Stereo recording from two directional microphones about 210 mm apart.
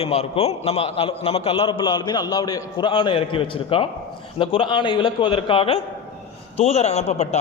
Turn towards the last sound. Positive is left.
turn(degrees=30)  # may be behind; listen again after turning